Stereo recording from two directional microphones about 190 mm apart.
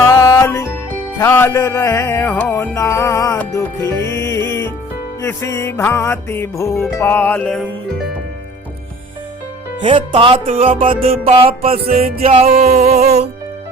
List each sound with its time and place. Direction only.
0.1 s music: 15° left (ahead or behind)
9.8 s music: 30° right (ahead or behind)
11.9 s music: 50° right (ahead or behind)
12.2 s music: 35° right (ahead or behind)